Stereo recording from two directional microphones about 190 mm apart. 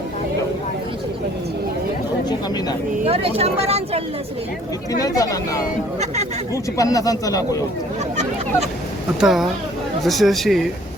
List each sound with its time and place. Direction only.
3.0 s speech: 30° right (ahead or behind)
4.9 s speech: 20° left (ahead or behind)
6.7 s speech: 20° left (ahead or behind)
9.2 s speech: centre (ahead or behind)